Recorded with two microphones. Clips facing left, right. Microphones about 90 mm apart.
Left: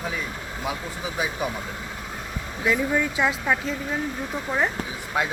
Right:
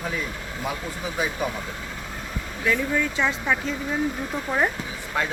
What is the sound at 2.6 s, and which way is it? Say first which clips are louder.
Speech: left 1 dB; 15° left (ahead or behind).